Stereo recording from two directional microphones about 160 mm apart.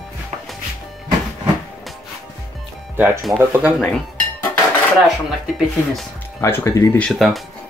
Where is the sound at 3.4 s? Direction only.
10° right (ahead or behind).